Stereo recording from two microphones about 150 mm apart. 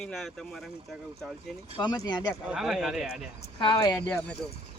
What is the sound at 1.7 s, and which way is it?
Speech, 25° left (ahead or behind).